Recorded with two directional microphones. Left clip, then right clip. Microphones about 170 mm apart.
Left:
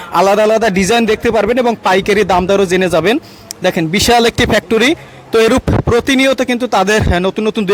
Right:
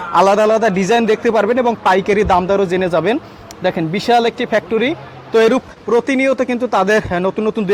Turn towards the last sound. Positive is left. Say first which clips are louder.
# left 3 dB
turn(degrees=40)  # may be behind; listen again after turning